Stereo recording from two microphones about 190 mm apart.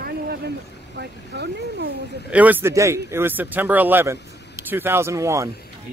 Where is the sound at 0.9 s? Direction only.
60° right (ahead or behind).